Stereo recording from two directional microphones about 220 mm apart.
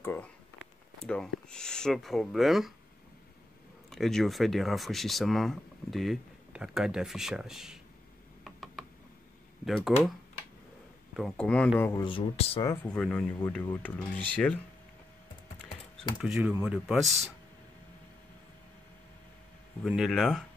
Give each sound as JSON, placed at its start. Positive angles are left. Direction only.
{"t": 0.0, "sound": "speech", "side_deg": 10}
{"t": 3.9, "sound": "speech", "side_deg": 0}
{"t": 8.5, "sound": "mechanisms", "side_deg": 0}
{"t": 9.7, "sound": "speech", "side_deg": 0}
{"t": 11.1, "sound": "speech", "side_deg": 5}
{"t": 11.8, "sound": "speech", "side_deg": 20}
{"t": 12.6, "sound": "speech", "side_deg": 5}
{"t": 16.2, "sound": "speech", "side_deg": -5}
{"t": 19.8, "sound": "speech", "side_deg": 0}